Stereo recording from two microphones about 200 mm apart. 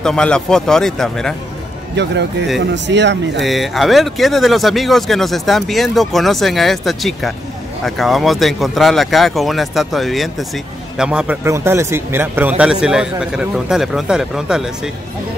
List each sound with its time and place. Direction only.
0.0 s speech: 5° left (ahead or behind)
2.0 s speech: 60° right (ahead or behind)
3.3 s speech: centre (ahead or behind)